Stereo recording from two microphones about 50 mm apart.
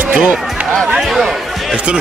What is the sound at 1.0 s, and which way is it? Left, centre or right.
Speech, centre.